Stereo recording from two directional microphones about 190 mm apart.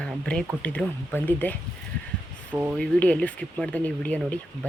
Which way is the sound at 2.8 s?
5° left (ahead or behind).